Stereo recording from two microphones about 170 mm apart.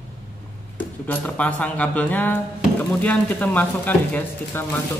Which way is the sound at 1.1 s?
10° left (ahead or behind).